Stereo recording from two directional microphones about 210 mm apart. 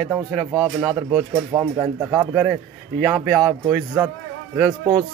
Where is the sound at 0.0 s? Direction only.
Centre (ahead or behind).